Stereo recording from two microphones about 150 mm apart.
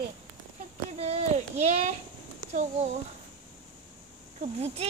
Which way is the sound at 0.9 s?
45° right (ahead or behind).